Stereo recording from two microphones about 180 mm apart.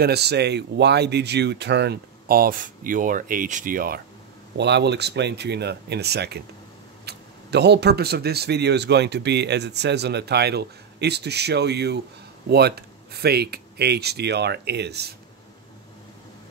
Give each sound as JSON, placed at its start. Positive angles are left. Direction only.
{"t": 0.0, "sound": "speech", "side_deg": -65}
{"t": 4.6, "sound": "speech", "side_deg": -70}